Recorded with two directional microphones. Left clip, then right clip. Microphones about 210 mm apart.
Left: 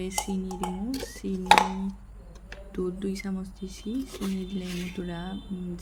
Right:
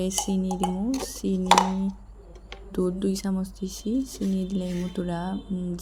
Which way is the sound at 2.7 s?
20° right (ahead or behind).